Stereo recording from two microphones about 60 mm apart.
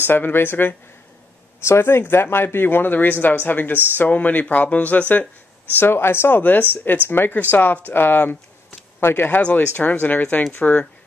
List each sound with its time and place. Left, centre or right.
0.0 s speech: left
1.8 s speech: left
5.8 s speech: left
6.7 s speech: left
9.4 s speech: left